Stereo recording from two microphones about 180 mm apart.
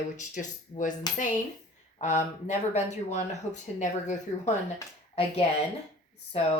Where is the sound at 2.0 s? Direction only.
40° left (ahead or behind).